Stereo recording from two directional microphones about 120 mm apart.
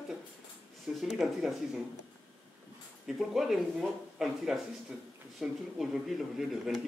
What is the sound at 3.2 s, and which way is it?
Speech, 5° right (ahead or behind).